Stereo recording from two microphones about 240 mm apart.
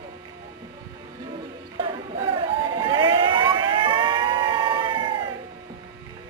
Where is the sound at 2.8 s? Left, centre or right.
Centre.